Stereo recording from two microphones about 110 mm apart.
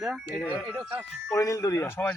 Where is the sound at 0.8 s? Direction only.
25° right (ahead or behind).